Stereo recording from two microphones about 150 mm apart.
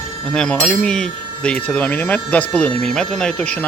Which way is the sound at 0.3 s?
5° left (ahead or behind).